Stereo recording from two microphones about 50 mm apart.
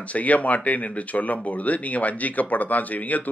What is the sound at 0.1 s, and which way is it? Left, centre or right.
Speech, left.